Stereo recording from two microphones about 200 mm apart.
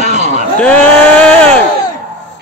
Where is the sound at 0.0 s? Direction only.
35° right (ahead or behind).